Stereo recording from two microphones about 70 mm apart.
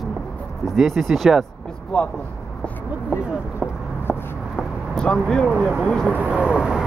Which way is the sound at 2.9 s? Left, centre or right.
Right.